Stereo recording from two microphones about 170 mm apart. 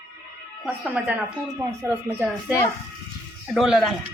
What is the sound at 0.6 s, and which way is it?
Speech, 10° right (ahead or behind).